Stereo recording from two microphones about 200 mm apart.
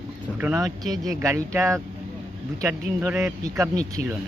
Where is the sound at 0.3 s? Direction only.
10° right (ahead or behind).